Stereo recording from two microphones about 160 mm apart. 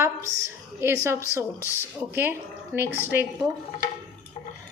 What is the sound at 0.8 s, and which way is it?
A woman's voice, 15° right (ahead or behind).